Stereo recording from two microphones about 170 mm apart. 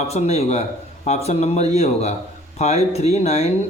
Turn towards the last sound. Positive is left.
turn(degrees=40)  # may be behind; listen again after turning